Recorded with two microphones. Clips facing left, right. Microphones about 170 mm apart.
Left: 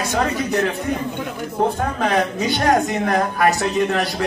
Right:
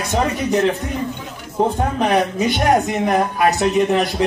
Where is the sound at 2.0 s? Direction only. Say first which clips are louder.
Right 3 dB; 20° right (ahead or behind).